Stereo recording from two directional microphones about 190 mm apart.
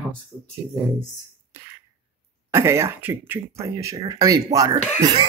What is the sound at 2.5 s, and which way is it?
Speech, 15° right (ahead or behind).